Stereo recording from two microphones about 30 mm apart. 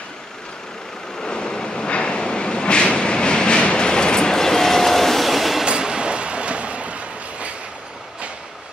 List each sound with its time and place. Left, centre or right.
1.3 s vehicle: left
1.9 s train: left
4.4 s train: centre
5.7 s train: right